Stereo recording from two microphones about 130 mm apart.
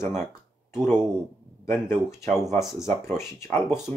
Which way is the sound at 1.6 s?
20° left (ahead or behind).